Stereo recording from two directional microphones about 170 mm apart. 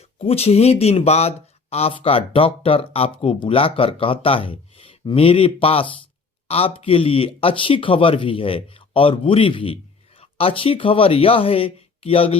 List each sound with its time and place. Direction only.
0.0 s speech: 35° left (ahead or behind)